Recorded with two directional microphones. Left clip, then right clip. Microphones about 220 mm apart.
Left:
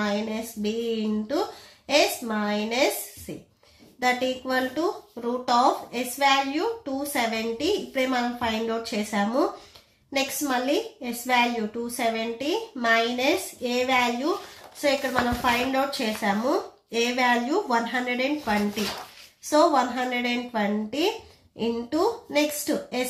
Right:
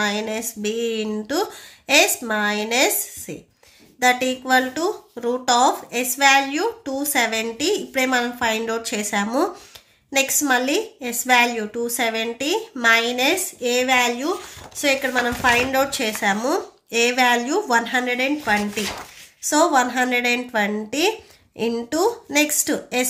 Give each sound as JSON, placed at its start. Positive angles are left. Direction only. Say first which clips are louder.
{"t": 0.0, "sound": "a woman's voice", "louder": "right 5 dB", "side_deg": -40}
{"t": 4.0, "sound": "a woman's voice", "louder": "right 6 dB", "side_deg": -40}
{"t": 15.7, "sound": "a woman's voice", "louder": "right 5 dB", "side_deg": -35}